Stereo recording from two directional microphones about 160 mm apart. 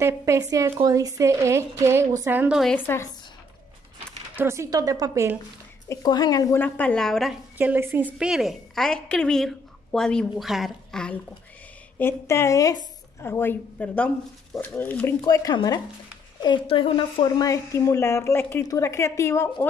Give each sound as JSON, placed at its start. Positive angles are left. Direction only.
{"t": 0.0, "sound": "a woman's voice", "side_deg": -20}
{"t": 4.4, "sound": "a woman's voice", "side_deg": -15}
{"t": 5.9, "sound": "a woman's voice", "side_deg": 25}
{"t": 7.5, "sound": "a woman's voice", "side_deg": -10}
{"t": 12.0, "sound": "a woman's voice", "side_deg": 15}
{"t": 15.2, "sound": "a woman's voice", "side_deg": 20}